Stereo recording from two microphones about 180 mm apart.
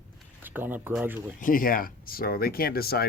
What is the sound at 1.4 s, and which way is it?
Speech, 50° left (ahead or behind).